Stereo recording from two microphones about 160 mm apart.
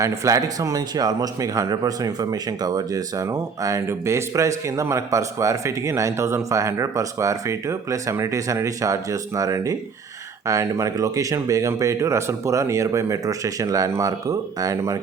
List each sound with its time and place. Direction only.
0.0 s speech: 20° right (ahead or behind)